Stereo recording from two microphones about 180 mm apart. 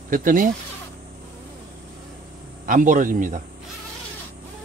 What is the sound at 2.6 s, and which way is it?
Speech, 45° right (ahead or behind).